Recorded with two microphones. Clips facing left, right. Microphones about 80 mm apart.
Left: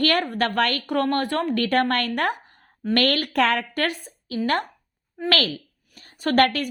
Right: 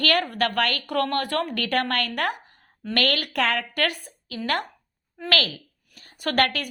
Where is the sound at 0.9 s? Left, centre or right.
Left.